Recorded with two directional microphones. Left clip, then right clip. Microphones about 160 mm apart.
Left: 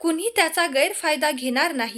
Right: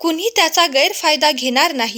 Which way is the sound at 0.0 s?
30° right (ahead or behind).